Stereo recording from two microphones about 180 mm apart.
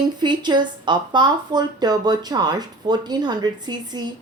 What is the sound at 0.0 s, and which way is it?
Speech, 25° right (ahead or behind).